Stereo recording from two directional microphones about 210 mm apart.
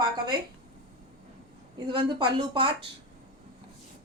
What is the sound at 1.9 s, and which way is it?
Speech, 20° right (ahead or behind).